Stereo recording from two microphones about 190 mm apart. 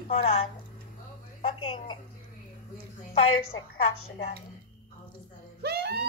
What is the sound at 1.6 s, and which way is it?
Music, 30° left (ahead or behind).